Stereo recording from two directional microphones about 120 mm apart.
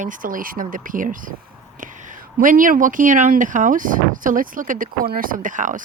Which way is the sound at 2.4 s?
90° right.